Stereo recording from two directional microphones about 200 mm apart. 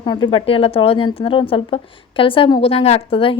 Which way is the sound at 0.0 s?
25° left (ahead or behind).